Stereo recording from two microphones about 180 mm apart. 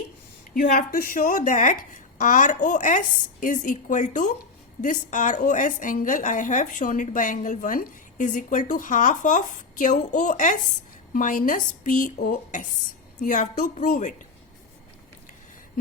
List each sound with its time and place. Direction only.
0.5 s a woman's voice: 50° left (ahead or behind)